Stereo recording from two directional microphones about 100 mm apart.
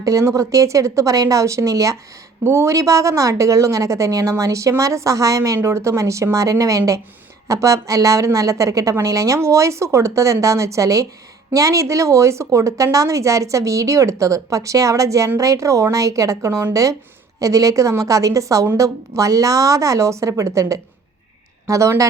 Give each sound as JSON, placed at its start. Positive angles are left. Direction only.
{"t": 0.0, "sound": "speech", "side_deg": -35}